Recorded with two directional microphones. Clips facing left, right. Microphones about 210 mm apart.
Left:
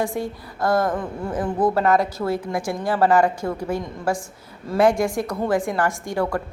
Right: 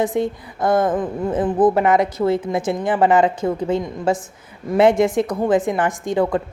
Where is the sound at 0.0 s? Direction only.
20° right (ahead or behind).